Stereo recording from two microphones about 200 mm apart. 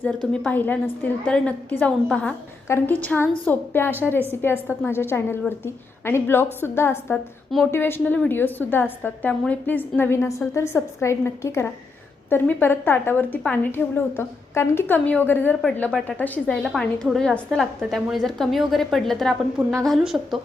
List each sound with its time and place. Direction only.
0.4 s a woman's voice: 10° left (ahead or behind)